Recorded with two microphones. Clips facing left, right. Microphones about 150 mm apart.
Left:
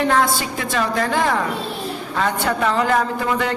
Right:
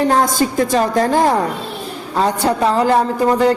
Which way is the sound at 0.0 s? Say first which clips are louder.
Right 4 dB; 40° right (ahead or behind).